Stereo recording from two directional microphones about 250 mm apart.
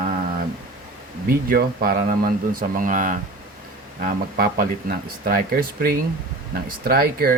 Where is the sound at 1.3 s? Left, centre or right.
Right.